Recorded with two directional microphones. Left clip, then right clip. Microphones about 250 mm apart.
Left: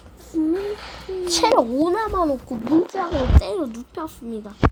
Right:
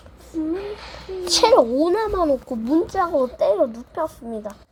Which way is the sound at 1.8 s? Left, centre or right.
Centre.